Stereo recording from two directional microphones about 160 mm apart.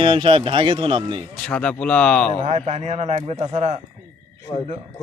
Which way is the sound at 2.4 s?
45° right (ahead or behind).